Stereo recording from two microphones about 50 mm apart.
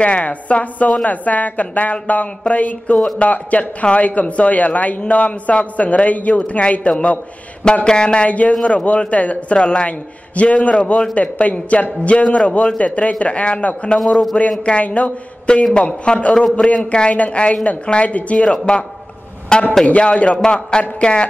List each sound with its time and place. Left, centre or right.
0.0 s a man's voice: left
13.9 s a man's voice: centre
14.6 s a man's voice: left